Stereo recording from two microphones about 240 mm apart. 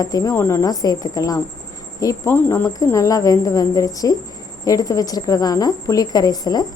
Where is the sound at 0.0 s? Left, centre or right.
Centre.